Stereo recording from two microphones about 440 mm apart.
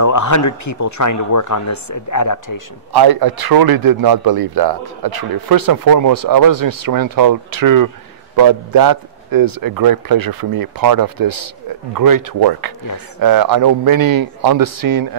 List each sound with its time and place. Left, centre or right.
0.0 s speech: left
2.9 s a man's voice: right